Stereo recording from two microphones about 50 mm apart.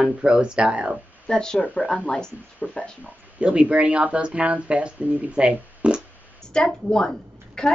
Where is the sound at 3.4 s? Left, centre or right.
Right.